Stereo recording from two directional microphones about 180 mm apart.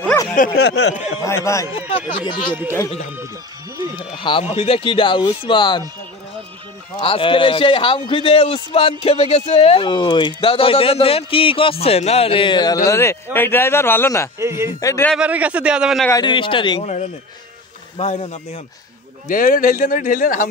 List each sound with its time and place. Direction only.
0.0 s a sound: 10° left (ahead or behind)
0.6 s speech: 70° left (ahead or behind)
1.2 s speech: 15° left (ahead or behind)
2.0 s speech: 30° left (ahead or behind)
4.0 s speech: 30° left (ahead or behind)
7.0 s a man's voice: 30° left (ahead or behind); by 14.3 s 15° left (ahead or behind)
14.4 s speech: 15° right (ahead or behind)
14.8 s speech: 15° left (ahead or behind)
15.1 s a man's voice: 5° right (ahead or behind)
16.1 s speech: 25° left (ahead or behind)
16.8 s a man's voice: 40° left (ahead or behind)
19.2 s speech: 50° left (ahead or behind)